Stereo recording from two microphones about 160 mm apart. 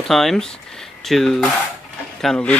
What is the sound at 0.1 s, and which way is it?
Speech, centre (ahead or behind).